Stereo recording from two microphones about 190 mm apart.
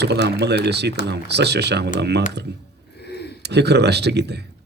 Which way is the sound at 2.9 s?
60° left (ahead or behind).